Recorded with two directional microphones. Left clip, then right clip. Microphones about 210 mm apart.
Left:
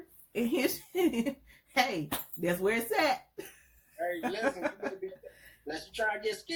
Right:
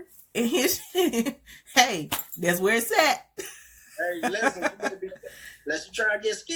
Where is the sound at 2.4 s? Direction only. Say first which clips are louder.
Right 7 dB; 35° right (ahead or behind).